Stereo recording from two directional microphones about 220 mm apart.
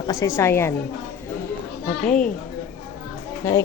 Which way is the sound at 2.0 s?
5° left (ahead or behind).